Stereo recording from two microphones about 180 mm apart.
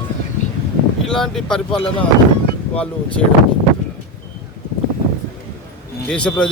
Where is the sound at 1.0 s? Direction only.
5° left (ahead or behind).